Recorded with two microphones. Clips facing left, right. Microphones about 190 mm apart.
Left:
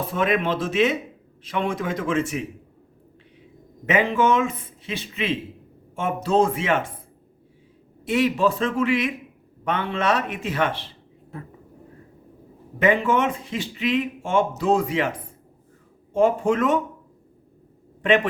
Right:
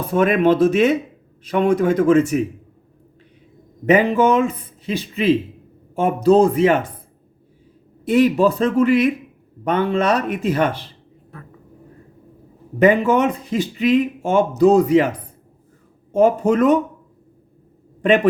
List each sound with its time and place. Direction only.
0.1 s a man's voice: 45° right (ahead or behind)
3.8 s speech: 40° right (ahead or behind)
8.0 s speech: 40° right (ahead or behind)
12.8 s speech: 40° right (ahead or behind)
16.1 s speech: 40° right (ahead or behind)